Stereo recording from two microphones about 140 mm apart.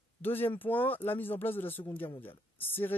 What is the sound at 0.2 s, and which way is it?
Speech, 15° left (ahead or behind).